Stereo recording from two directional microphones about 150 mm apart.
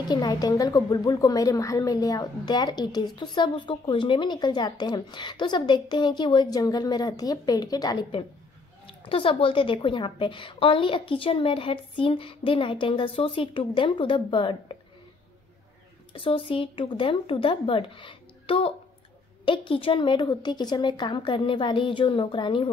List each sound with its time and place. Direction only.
0.1 s a woman's voice: 25° left (ahead or behind)
16.1 s a woman's voice: 35° left (ahead or behind)